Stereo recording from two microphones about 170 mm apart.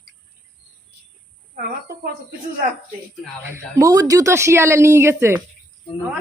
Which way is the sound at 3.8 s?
20° right (ahead or behind).